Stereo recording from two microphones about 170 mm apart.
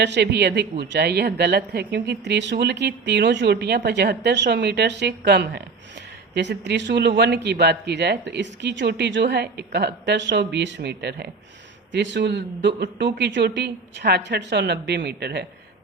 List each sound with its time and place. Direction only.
0.0 s a man's voice: 85° right
11.9 s a man's voice: 90° right; by 15.4 s 75° right (ahead or behind)